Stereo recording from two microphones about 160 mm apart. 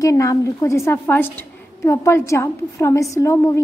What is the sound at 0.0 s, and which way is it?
A woman's voice, 20° left (ahead or behind).